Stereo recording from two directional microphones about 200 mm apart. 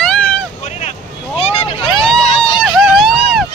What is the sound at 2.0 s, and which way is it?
Vehicle, centre (ahead or behind).